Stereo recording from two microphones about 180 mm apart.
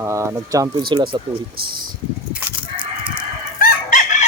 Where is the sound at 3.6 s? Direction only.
50° left (ahead or behind).